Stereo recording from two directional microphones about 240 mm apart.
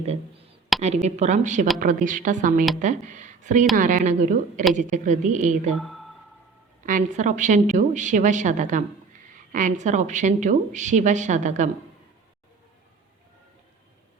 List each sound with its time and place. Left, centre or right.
0.8 s a woman's voice: right
5.8 s speech: centre
6.8 s a woman's voice: right